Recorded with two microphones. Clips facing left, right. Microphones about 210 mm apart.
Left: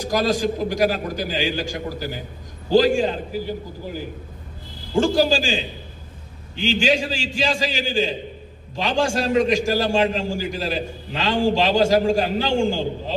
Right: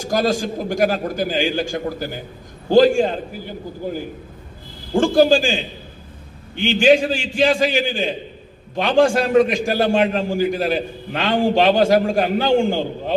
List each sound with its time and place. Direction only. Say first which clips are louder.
0.1 s a man's voice: right 1 dB; 50° right (ahead or behind)
4.9 s a man's voice: right 4 dB; 55° right (ahead or behind)